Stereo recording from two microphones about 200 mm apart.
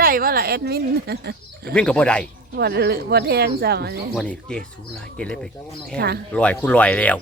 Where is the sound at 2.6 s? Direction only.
55° right (ahead or behind).